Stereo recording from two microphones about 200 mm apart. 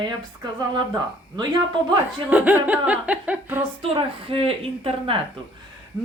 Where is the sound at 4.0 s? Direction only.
30° right (ahead or behind).